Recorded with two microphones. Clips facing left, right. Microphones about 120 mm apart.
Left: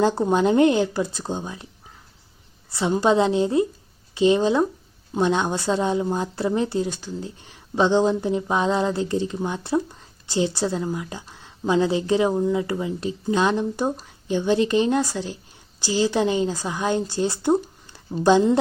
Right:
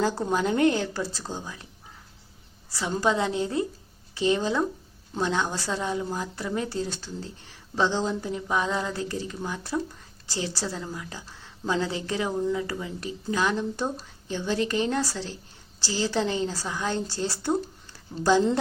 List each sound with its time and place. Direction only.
0.0 s speech: 25° left (ahead or behind)
2.6 s a woman's voice: 25° left (ahead or behind)